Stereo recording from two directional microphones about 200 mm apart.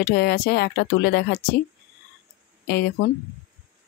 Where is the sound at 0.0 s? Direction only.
50° left (ahead or behind).